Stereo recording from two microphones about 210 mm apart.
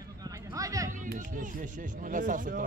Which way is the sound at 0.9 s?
40° right (ahead or behind).